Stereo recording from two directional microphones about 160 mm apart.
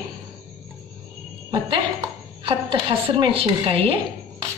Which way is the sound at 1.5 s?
30° right (ahead or behind).